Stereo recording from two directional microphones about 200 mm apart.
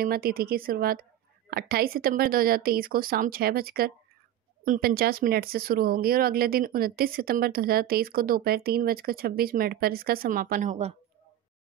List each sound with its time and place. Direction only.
0.0 s speech: 50° right (ahead or behind); by 11.0 s 35° right (ahead or behind)